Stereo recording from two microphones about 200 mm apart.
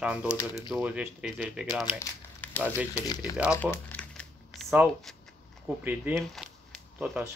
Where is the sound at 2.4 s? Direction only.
10° left (ahead or behind).